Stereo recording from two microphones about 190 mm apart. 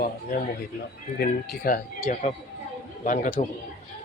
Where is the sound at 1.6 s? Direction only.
50° left (ahead or behind).